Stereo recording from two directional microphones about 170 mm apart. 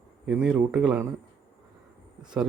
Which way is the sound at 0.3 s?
5° right (ahead or behind).